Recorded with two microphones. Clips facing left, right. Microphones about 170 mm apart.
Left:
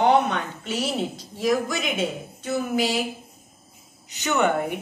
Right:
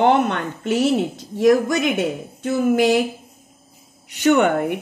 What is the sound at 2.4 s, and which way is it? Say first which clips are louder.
Speech: right 7 dB; 55° right (ahead or behind).